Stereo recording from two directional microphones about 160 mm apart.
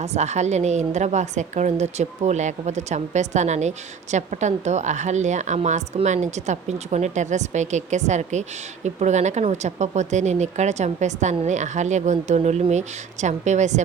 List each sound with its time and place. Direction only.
0.0 s a woman's voice: 45° right (ahead or behind)